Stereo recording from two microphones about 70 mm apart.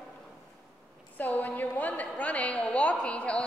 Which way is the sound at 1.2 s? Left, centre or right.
Left.